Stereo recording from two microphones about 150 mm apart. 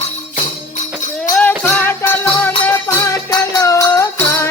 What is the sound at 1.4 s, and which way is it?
Music, 10° left (ahead or behind).